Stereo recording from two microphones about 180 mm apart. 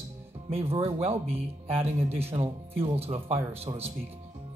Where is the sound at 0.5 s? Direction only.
30° right (ahead or behind).